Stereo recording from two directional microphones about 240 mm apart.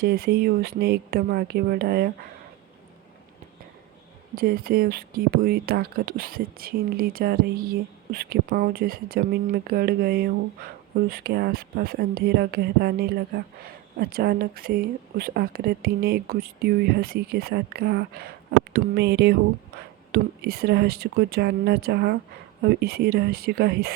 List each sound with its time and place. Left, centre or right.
0.0 s speech: right
4.4 s speech: right